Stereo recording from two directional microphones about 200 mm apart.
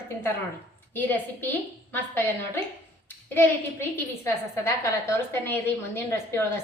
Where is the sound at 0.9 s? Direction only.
10° left (ahead or behind).